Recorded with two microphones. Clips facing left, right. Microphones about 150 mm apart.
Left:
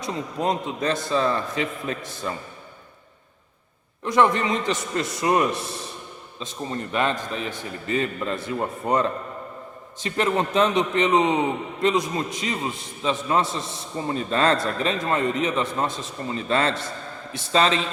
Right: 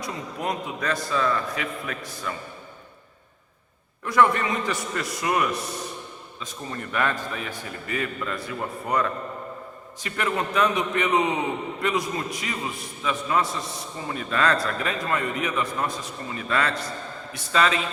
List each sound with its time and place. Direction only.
0.0 s a man's voice: 25° left (ahead or behind)
4.0 s a man's voice: 25° left (ahead or behind)